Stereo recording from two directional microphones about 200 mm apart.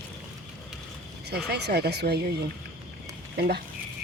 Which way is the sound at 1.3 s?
55° right (ahead or behind).